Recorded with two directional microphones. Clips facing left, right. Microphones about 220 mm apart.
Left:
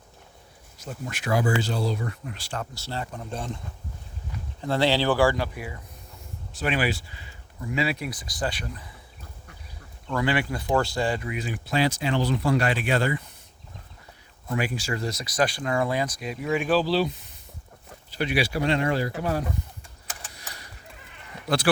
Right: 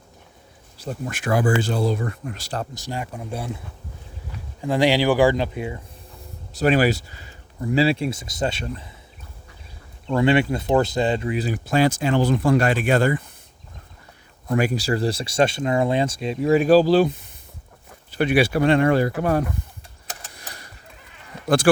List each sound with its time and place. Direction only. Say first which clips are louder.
1.0 s speech: right 4 dB; 50° right (ahead or behind)
2.7 s speech: right 3 dB; 15° right (ahead or behind)
4.6 s speech: right 4 dB; 15° right (ahead or behind)
6.5 s speech: right 8 dB; 40° right (ahead or behind)
10.1 s speech: right 7 dB; 25° right (ahead or behind); by 13.2 s 45° right (ahead or behind)
14.5 s speech: right 7 dB; 45° right (ahead or behind)
21.4 s speech: right 6 dB; 50° right (ahead or behind)